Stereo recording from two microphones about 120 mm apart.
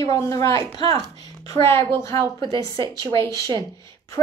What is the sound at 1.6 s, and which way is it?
A woman's voice, 20° left (ahead or behind).